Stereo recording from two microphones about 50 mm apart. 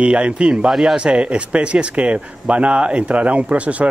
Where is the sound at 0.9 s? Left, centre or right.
Centre.